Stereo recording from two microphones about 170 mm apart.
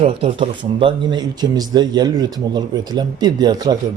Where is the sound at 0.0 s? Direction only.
35° right (ahead or behind).